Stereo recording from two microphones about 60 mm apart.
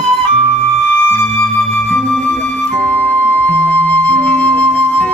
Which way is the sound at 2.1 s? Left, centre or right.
Centre.